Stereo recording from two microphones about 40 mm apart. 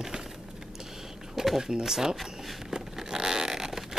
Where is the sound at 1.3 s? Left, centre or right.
Centre.